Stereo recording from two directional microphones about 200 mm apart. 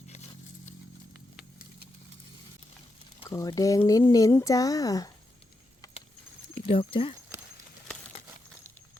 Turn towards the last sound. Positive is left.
turn(degrees=-15)  # may be behind; listen again after turning